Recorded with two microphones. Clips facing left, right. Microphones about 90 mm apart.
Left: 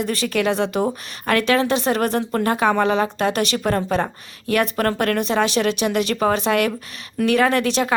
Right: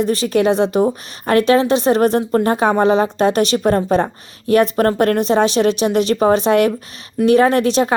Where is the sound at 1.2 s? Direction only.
30° right (ahead or behind).